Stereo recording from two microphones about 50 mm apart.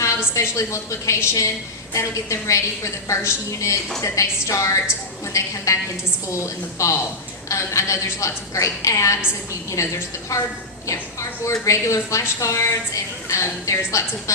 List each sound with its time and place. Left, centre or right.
0.0 s a woman's voice: left
2.0 s a woman's voice: left
3.2 s a woman's voice: left
4.0 s a woman's voice: left